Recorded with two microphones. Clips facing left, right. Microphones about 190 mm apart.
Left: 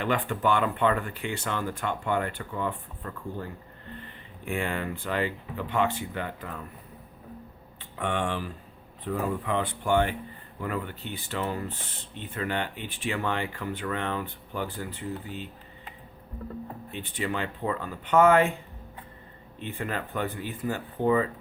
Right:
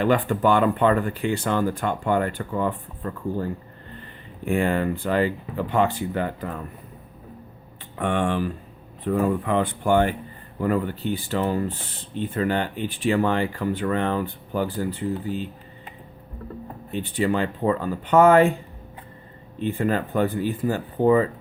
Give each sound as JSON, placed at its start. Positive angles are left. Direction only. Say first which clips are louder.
{"t": 0.0, "sound": "speech", "louder": "right 7 dB", "side_deg": -40}
{"t": 4.4, "sound": "speech", "louder": "right 8 dB", "side_deg": -40}
{"t": 7.9, "sound": "speech", "louder": "right 6 dB", "side_deg": -50}
{"t": 16.9, "sound": "speech", "louder": "right 9 dB", "side_deg": -35}
{"t": 19.5, "sound": "speech", "louder": "right 10 dB", "side_deg": -35}